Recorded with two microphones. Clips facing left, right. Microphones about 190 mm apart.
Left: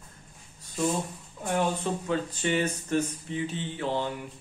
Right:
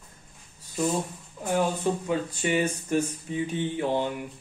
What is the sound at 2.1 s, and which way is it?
A man's voice, 10° right (ahead or behind).